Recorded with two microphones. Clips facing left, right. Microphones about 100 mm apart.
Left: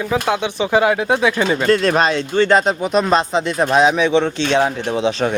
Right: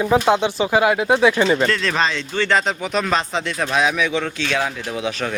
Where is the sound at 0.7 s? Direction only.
15° right (ahead or behind).